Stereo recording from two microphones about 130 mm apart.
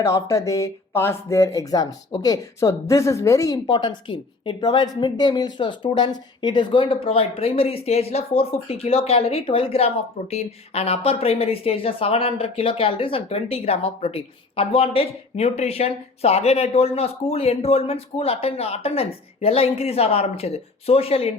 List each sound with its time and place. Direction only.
0.0 s speech: 25° left (ahead or behind); by 21.3 s 50° left (ahead or behind)